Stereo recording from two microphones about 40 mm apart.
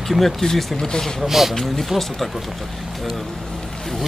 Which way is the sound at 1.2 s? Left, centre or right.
Centre.